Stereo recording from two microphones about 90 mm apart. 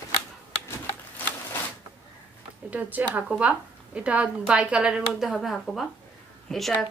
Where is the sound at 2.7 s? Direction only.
20° right (ahead or behind).